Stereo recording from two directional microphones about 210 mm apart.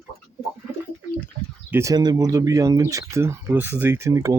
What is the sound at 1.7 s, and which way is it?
Speech, 15° right (ahead or behind).